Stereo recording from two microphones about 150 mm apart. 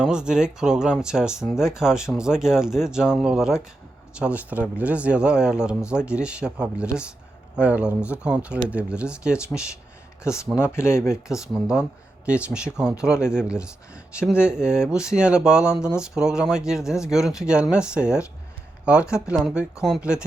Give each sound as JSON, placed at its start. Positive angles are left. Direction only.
{"t": 0.0, "sound": "speech", "side_deg": -5}
{"t": 10.6, "sound": "speech", "side_deg": 15}
{"t": 11.1, "sound": "speech", "side_deg": -5}
{"t": 19.1, "sound": "speech", "side_deg": -5}